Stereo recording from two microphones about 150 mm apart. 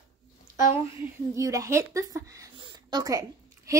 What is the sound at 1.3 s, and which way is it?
A woman's voice, 20° right (ahead or behind).